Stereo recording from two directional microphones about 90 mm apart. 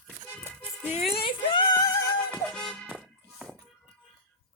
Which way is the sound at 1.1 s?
75° left (ahead or behind).